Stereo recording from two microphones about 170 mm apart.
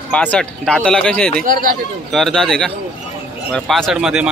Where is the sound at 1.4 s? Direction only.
55° right (ahead or behind).